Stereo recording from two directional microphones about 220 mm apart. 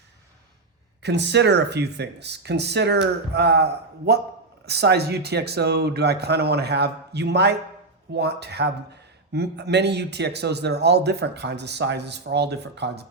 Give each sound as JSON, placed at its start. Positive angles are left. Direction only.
{"t": 1.0, "sound": "speech", "side_deg": -50}